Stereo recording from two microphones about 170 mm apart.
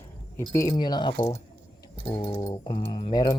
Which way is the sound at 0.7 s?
25° left (ahead or behind).